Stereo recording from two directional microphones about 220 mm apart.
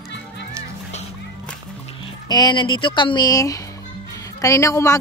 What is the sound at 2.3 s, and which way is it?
A woman's voice, 20° left (ahead or behind).